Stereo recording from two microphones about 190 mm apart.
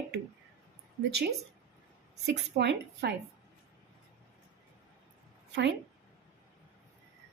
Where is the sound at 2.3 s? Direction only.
65° right (ahead or behind).